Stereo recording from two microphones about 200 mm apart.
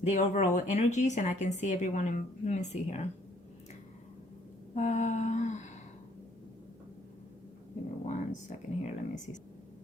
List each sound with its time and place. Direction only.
0.0 s speech: 35° left (ahead or behind)
4.7 s speech: 35° left (ahead or behind)
8.0 s speech: 40° left (ahead or behind)